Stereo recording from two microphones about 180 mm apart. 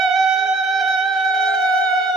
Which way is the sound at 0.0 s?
Centre (ahead or behind).